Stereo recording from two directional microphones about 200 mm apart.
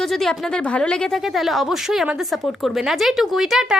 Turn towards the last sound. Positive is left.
turn(degrees=0)  # may be behind; listen again after turning